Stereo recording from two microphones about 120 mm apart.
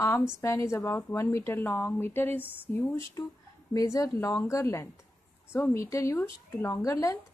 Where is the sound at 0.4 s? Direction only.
25° left (ahead or behind).